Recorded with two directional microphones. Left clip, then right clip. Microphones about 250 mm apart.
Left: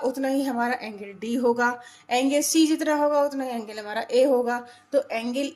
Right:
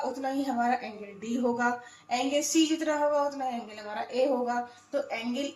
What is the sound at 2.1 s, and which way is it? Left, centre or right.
A woman's voice, left.